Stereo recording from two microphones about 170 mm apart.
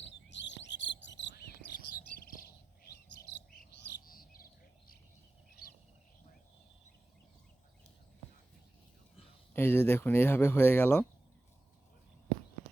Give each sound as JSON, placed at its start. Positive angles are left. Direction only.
{"t": 0.0, "sound": "a sound", "side_deg": 90}
{"t": 2.8, "sound": "bird", "side_deg": 65}
{"t": 9.5, "sound": "speech", "side_deg": 15}